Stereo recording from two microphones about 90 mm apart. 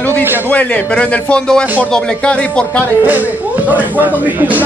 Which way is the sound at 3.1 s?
20° right (ahead or behind).